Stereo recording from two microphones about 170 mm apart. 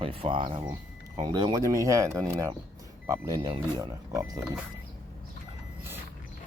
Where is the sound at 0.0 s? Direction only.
30° right (ahead or behind).